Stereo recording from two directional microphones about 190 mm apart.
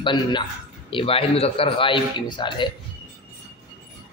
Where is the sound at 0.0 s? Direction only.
25° left (ahead or behind).